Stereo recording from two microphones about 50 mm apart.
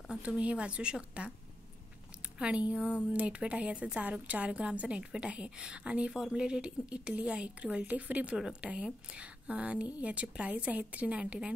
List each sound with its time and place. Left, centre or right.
0.1 s a woman's voice: right
2.3 s a woman's voice: right